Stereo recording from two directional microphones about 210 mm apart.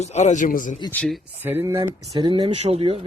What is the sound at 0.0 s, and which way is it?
Speech, 35° left (ahead or behind).